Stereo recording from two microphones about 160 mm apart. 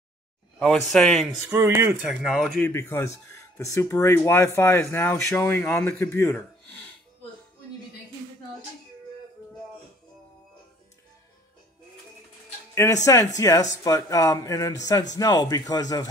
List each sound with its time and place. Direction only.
0.6 s speech: 5° left (ahead or behind)
1.5 s speech: 15° right (ahead or behind)
2.6 s speech: 15° left (ahead or behind)
12.7 s speech: 20° left (ahead or behind)